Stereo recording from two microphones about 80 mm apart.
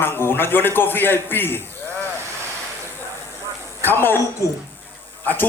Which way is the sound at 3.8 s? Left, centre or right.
Left.